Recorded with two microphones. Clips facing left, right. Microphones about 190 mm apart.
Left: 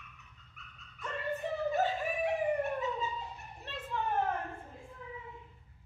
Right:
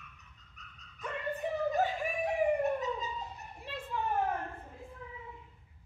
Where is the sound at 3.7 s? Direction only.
10° right (ahead or behind).